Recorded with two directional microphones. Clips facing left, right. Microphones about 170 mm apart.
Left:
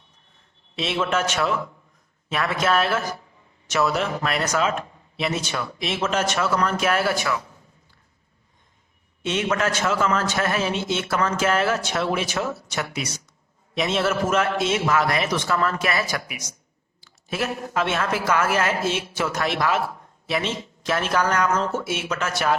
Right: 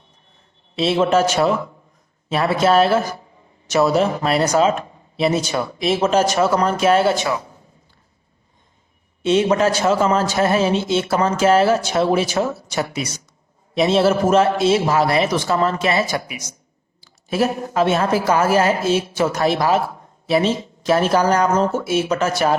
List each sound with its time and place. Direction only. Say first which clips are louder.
0.8 s a man's voice: right 8 dB; 30° right (ahead or behind)
9.2 s a man's voice: right 8 dB; 30° right (ahead or behind)